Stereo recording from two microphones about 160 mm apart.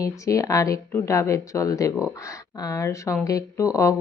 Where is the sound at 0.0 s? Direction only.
20° left (ahead or behind).